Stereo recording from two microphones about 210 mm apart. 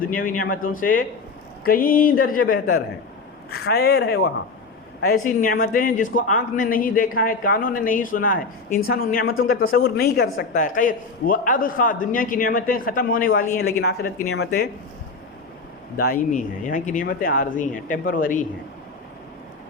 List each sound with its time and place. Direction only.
0.1 s a man's voice: 40° left (ahead or behind)
16.0 s a man's voice: 45° left (ahead or behind)